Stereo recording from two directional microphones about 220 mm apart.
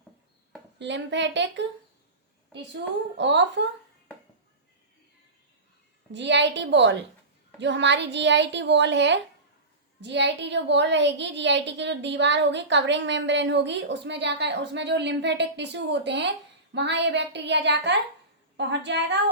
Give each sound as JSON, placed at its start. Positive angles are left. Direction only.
{"t": 0.8, "sound": "a woman's voice", "side_deg": -55}
{"t": 3.2, "sound": "a woman's voice", "side_deg": -55}
{"t": 6.1, "sound": "a woman's voice", "side_deg": -55}